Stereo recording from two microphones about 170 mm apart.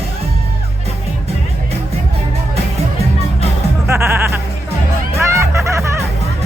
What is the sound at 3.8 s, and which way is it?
Music, 15° right (ahead or behind).